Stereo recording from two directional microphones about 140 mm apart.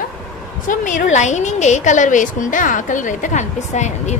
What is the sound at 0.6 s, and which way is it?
A woman's voice, 65° left (ahead or behind).